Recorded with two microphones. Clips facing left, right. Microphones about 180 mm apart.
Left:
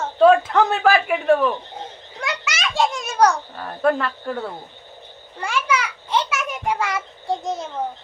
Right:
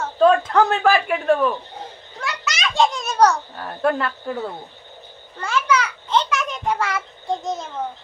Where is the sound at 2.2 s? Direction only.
20° left (ahead or behind).